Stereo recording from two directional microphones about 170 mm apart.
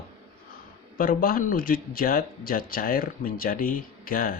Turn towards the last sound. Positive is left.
turn(degrees=55)  # may be behind; listen again after turning